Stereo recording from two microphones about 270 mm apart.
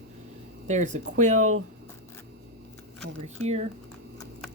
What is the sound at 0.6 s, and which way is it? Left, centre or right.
Speech, right.